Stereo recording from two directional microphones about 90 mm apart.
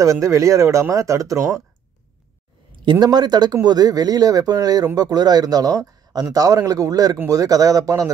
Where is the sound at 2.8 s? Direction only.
55° right (ahead or behind).